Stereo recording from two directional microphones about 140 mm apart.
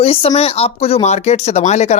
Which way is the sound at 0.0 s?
45° left (ahead or behind).